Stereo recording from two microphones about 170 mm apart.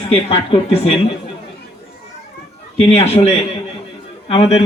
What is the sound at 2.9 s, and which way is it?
Speech, 40° left (ahead or behind).